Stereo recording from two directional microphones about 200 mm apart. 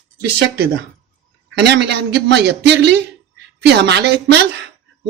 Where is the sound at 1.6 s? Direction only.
60° right (ahead or behind).